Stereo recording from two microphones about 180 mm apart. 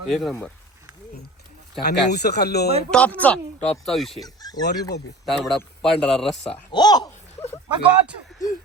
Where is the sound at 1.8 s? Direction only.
65° left (ahead or behind).